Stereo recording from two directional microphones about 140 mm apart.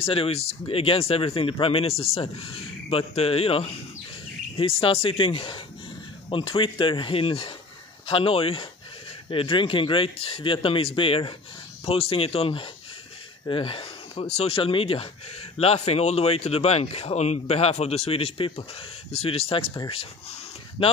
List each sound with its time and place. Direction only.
0.0 s speech: 40° left (ahead or behind)
20.8 s speech: 40° left (ahead or behind)